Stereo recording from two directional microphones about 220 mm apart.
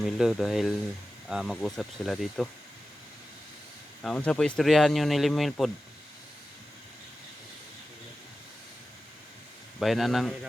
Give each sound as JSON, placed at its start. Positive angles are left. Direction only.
{"t": 0.0, "sound": "speech", "side_deg": 0}
{"t": 4.0, "sound": "speech", "side_deg": 5}
{"t": 9.8, "sound": "speech", "side_deg": 0}